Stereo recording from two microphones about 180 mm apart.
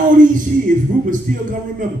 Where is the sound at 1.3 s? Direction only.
50° right (ahead or behind).